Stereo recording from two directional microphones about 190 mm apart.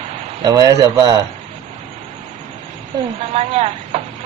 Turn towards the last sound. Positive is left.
turn(degrees=-30)  # may be behind; listen again after turning